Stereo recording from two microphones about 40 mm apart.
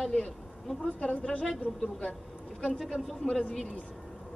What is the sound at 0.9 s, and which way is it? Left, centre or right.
Speech, left.